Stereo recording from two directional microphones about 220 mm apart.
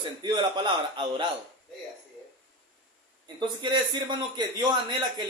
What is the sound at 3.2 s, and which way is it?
A man's voice, 20° right (ahead or behind).